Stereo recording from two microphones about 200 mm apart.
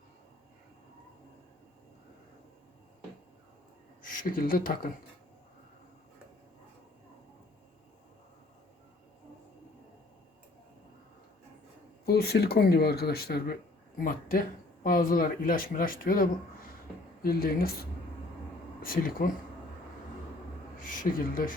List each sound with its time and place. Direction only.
4.0 s speech: 45° left (ahead or behind)
12.0 s speech: 50° left (ahead or behind)
18.8 s speech: 45° left (ahead or behind)
20.7 s speech: 45° left (ahead or behind)